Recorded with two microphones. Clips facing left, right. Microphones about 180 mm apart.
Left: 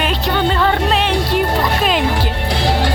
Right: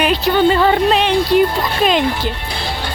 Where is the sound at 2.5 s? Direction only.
90° left.